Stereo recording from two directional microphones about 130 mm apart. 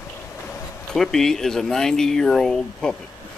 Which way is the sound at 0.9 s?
5° left (ahead or behind).